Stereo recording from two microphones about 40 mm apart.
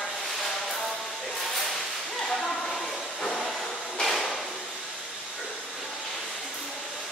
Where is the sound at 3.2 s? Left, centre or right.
Centre.